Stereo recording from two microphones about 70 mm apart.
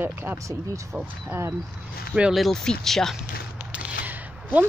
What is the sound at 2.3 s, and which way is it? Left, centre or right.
Speech, centre.